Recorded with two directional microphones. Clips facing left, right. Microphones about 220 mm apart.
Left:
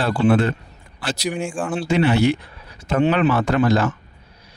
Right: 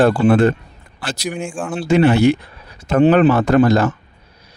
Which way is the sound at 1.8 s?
45° right (ahead or behind).